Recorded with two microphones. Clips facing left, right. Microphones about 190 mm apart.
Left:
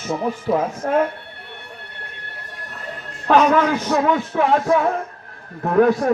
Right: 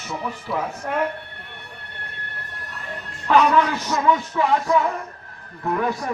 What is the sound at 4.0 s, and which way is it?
A man's voice, 65° left (ahead or behind).